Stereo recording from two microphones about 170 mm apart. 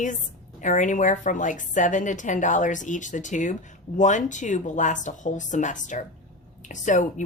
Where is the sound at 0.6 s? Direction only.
50° left (ahead or behind).